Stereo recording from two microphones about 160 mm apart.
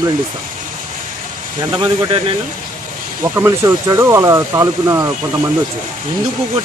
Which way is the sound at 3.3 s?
20° right (ahead or behind).